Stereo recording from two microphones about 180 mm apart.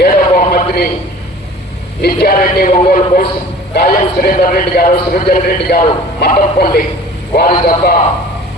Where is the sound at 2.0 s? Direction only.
60° left (ahead or behind).